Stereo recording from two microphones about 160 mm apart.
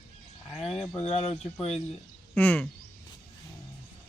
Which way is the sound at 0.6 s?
40° left (ahead or behind).